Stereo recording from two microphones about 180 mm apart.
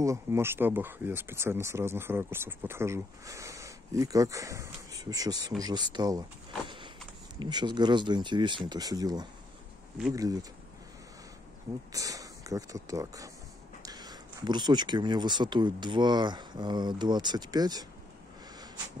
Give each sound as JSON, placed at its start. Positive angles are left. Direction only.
{"t": 0.0, "sound": "speech", "side_deg": -15}
{"t": 7.3, "sound": "speech", "side_deg": -25}
{"t": 11.9, "sound": "speech", "side_deg": -20}